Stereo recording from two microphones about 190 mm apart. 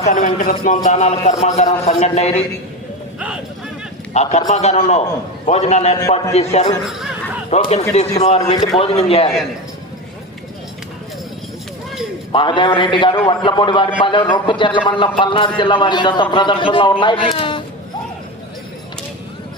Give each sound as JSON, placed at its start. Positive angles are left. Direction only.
{"t": 0.0, "sound": "a man's voice", "side_deg": 45}
{"t": 4.1, "sound": "a man's voice", "side_deg": 35}
{"t": 6.0, "sound": "a man's voice", "side_deg": 20}
{"t": 6.3, "sound": "a man's voice", "side_deg": 35}
{"t": 12.3, "sound": "a man's voice", "side_deg": 25}